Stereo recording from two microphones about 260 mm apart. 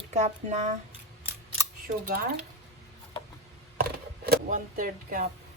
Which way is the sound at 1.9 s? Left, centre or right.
Right.